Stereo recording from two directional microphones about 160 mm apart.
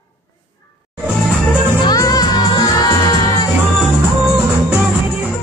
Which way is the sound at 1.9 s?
25° left (ahead or behind).